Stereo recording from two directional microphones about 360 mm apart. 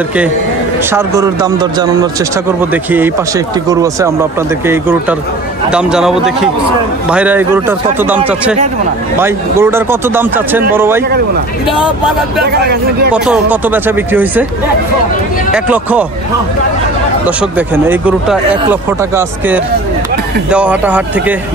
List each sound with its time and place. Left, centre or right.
0.9 s speech: centre
12.5 s speech: right
13.1 s speech: centre
15.5 s speech: centre
17.4 s speech: centre